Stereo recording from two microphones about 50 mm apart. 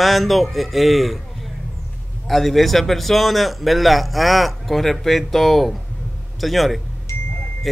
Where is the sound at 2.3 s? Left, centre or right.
Centre.